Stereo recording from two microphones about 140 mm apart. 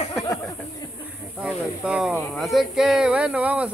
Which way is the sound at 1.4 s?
5° right (ahead or behind).